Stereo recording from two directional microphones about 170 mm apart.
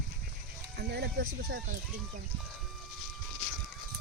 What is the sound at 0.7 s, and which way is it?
Speech, 65° right (ahead or behind).